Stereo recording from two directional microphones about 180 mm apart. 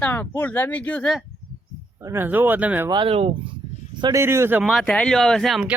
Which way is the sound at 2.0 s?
15° right (ahead or behind).